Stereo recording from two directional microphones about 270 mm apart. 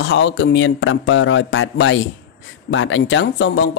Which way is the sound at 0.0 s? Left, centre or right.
Left.